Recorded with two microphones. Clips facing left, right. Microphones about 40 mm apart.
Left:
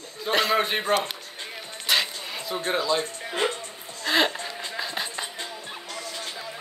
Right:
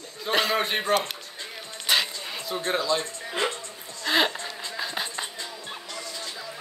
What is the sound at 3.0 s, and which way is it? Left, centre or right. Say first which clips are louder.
Speech: left 2 dB; left.